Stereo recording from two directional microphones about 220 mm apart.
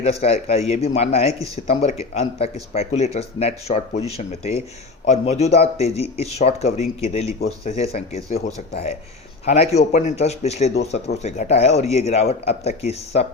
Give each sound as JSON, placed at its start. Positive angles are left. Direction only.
{"t": 0.0, "sound": "speech", "side_deg": 30}
{"t": 1.3, "sound": "speech", "side_deg": -15}
{"t": 1.5, "sound": "speech", "side_deg": 30}
{"t": 9.5, "sound": "speech", "side_deg": 30}